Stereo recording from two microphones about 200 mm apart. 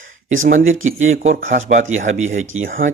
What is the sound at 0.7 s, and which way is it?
Speech, 85° right.